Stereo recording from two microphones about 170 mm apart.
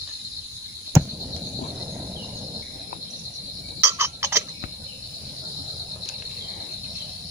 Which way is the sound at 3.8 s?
15° right (ahead or behind).